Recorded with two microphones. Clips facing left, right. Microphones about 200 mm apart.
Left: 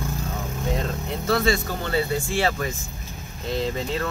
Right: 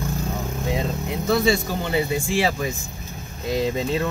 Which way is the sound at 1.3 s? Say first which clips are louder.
Right 2 dB; 10° right (ahead or behind).